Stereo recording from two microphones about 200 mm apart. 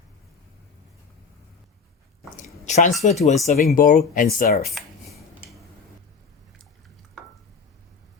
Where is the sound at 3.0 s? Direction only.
35° left (ahead or behind).